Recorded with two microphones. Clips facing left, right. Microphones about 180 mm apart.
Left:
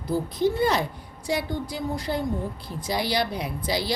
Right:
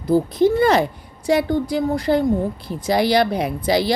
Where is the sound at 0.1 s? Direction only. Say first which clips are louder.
Right 8 dB; 90° right.